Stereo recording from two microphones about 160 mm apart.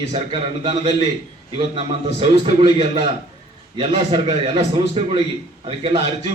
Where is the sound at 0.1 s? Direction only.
35° right (ahead or behind).